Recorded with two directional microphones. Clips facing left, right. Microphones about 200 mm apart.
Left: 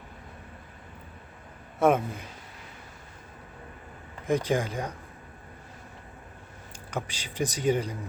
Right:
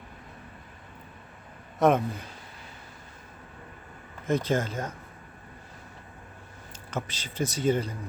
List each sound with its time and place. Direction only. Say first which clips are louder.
1.8 s speech: even; 10° left (ahead or behind)
4.3 s speech: even; 15° left (ahead or behind)
6.7 s speech: even; 10° left (ahead or behind)